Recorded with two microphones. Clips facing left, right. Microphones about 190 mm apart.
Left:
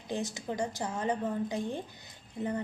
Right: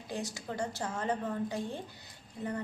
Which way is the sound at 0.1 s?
20° left (ahead or behind).